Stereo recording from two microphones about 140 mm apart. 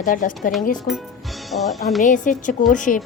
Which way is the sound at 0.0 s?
70° left (ahead or behind).